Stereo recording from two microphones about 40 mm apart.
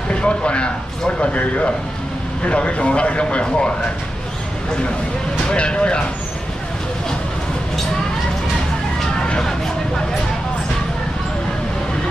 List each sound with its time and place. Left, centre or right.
0.1 s speech: left
5.5 s speech: left